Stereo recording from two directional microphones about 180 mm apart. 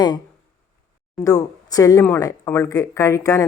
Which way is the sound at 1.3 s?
20° left (ahead or behind).